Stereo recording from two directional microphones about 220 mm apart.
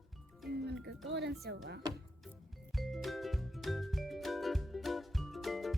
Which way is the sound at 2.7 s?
Centre (ahead or behind).